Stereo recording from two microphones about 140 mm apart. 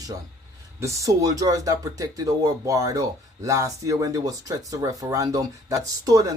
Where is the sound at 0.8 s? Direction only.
25° right (ahead or behind).